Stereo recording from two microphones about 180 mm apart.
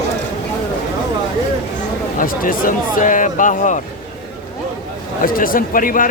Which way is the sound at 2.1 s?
50° left (ahead or behind).